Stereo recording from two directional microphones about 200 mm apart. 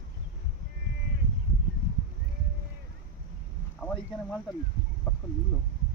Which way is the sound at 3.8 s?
10° left (ahead or behind).